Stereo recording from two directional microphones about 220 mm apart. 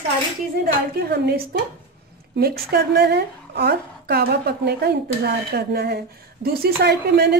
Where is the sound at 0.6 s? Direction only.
45° right (ahead or behind).